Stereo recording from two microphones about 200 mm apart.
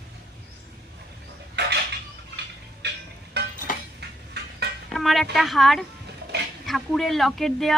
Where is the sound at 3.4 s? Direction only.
55° right (ahead or behind).